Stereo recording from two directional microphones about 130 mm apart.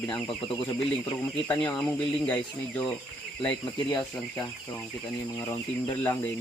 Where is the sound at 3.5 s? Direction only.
35° left (ahead or behind).